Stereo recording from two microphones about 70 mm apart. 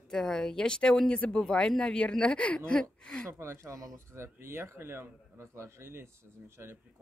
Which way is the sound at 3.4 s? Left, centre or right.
Right.